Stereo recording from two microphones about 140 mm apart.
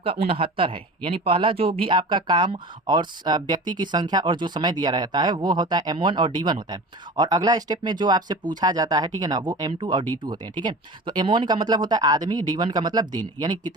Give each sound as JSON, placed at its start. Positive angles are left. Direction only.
{"t": 0.0, "sound": "speech", "side_deg": -40}